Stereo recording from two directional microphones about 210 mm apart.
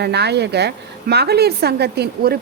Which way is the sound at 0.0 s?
50° right (ahead or behind).